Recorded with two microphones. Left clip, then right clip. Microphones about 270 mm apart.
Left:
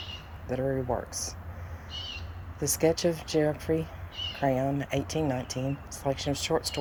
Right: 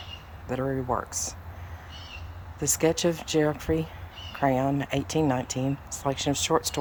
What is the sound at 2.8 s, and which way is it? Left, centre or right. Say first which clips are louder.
Speech: right 1 dB; centre.